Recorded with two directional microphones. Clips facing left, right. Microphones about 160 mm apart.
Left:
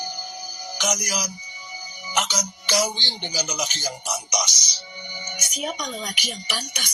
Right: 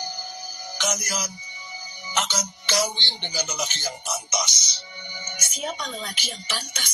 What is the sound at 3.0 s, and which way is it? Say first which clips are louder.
Music: left 2 dB; 15° left (ahead or behind).